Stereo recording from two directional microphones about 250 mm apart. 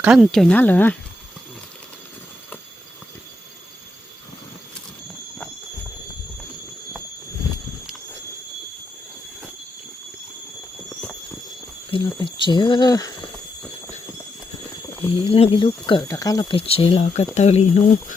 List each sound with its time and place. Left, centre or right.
0.0 s speech: centre
11.9 s a sound: centre
14.9 s speech: centre